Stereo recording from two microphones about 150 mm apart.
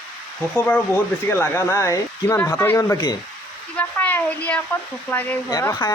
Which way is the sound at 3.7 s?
10° left (ahead or behind).